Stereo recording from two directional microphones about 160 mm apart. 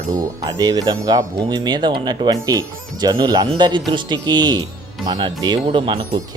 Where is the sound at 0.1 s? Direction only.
25° right (ahead or behind).